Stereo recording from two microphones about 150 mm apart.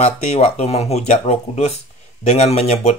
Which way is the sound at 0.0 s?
50° left (ahead or behind).